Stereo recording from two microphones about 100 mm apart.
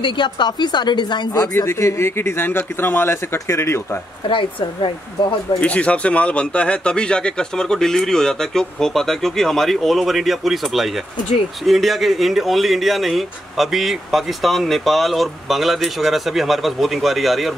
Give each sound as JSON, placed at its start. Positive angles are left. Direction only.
{"t": 0.0, "sound": "a woman's voice", "side_deg": 50}
{"t": 1.3, "sound": "speech", "side_deg": 30}
{"t": 4.3, "sound": "speech", "side_deg": 55}
{"t": 5.6, "sound": "speech", "side_deg": 10}